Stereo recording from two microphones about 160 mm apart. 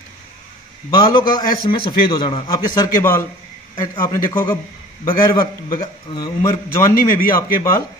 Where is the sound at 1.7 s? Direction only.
30° left (ahead or behind); by 3.2 s 15° left (ahead or behind).